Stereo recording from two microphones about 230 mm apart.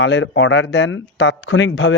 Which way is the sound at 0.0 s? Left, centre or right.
Left.